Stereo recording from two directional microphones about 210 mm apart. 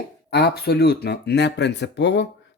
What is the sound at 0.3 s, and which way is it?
Speech, 50° left (ahead or behind).